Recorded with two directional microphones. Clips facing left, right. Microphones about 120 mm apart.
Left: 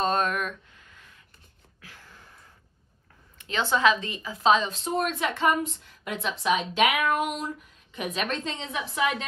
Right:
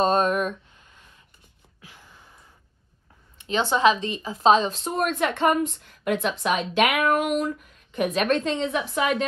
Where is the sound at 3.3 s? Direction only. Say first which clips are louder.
Right 3 dB; 25° right (ahead or behind).